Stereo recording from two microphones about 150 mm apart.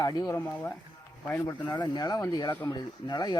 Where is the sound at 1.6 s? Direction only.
30° left (ahead or behind).